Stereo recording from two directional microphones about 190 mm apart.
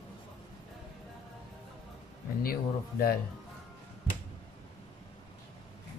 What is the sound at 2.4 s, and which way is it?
Speech, 50° left (ahead or behind).